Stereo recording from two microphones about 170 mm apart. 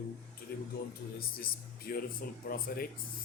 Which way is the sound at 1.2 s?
60° left (ahead or behind).